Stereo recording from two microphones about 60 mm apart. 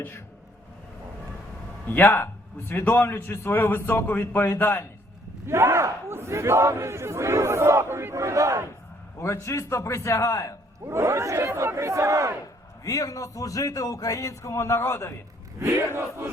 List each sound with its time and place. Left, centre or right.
1.9 s a man's voice: left
5.5 s speech: right
9.1 s a man's voice: left
10.8 s speech: right
12.8 s speech: left
15.5 s speech: right